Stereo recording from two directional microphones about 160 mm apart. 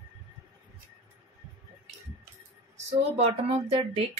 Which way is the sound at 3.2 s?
40° right (ahead or behind).